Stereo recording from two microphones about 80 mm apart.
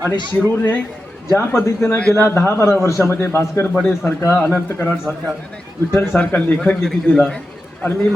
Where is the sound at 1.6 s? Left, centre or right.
Left.